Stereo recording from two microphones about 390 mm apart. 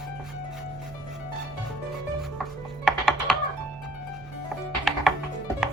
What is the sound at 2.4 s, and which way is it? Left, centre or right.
Music, centre.